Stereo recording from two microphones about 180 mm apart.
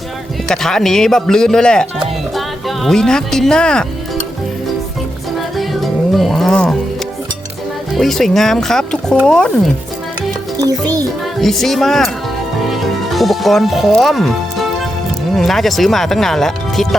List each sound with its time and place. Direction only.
0.4 s speech: 5° left (ahead or behind)
5.5 s music: centre (ahead or behind)
7.9 s speech: centre (ahead or behind)
10.6 s speech: 20° right (ahead or behind)
11.3 s speech: centre (ahead or behind)
15.4 s speech: centre (ahead or behind)